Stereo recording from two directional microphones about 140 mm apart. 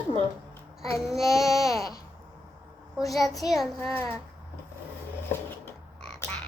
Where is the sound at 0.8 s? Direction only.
Centre (ahead or behind).